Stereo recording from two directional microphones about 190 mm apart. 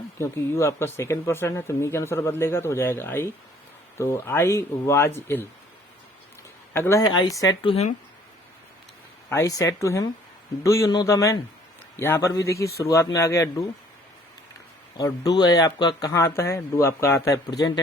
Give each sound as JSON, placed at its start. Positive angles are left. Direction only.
{"t": 0.2, "sound": "speech", "side_deg": 15}
{"t": 6.7, "sound": "speech", "side_deg": 15}
{"t": 9.3, "sound": "speech", "side_deg": 15}
{"t": 14.9, "sound": "speech", "side_deg": 20}